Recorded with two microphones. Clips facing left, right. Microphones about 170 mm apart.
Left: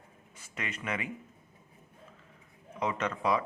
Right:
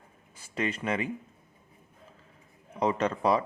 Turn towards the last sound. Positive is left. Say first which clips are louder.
# right 4 dB
turn(degrees=-35)  # may be behind; listen again after turning